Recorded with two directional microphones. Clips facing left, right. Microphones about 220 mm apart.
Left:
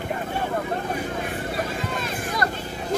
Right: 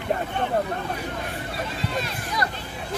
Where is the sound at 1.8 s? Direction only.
50° left (ahead or behind).